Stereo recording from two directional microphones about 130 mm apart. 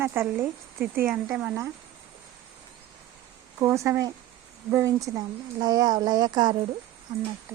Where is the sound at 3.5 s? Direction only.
20° right (ahead or behind).